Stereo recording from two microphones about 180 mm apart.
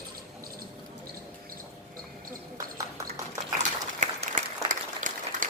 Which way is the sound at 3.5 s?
40° right (ahead or behind).